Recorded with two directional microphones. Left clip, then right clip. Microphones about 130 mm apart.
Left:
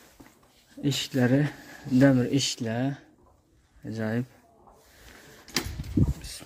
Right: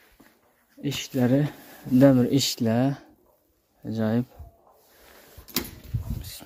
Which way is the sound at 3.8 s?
25° right (ahead or behind).